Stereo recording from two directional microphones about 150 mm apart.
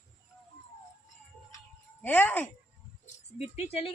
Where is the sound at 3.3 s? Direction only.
45° left (ahead or behind).